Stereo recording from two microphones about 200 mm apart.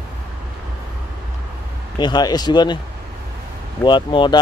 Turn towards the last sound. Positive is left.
turn(degrees=25)  # may be behind; listen again after turning